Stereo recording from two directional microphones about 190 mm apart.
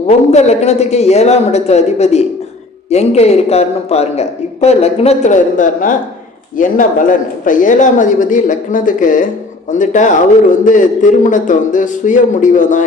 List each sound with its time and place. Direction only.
0.1 s a man's voice: 35° left (ahead or behind)